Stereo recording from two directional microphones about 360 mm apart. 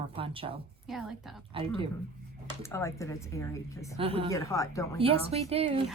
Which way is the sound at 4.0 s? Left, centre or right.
Centre.